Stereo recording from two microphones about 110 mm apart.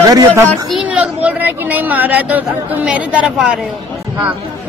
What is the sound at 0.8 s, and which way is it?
Speech, 15° right (ahead or behind).